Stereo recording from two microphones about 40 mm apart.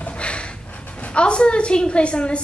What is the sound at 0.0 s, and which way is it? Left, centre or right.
A woman's voice, left.